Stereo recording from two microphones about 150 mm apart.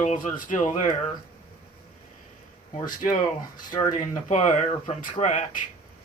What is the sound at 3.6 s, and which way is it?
Speech, 30° left (ahead or behind).